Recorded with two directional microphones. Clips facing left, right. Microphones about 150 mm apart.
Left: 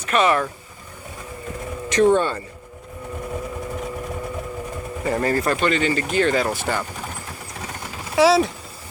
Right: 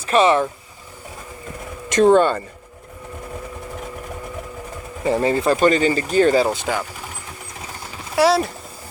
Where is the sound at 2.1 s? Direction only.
90° right.